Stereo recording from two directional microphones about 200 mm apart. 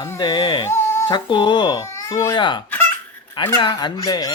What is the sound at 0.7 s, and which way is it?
Speech, 15° left (ahead or behind).